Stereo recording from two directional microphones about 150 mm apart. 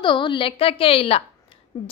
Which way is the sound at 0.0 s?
35° left (ahead or behind).